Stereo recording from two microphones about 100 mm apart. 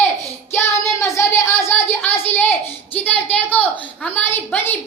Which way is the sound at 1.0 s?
25° left (ahead or behind).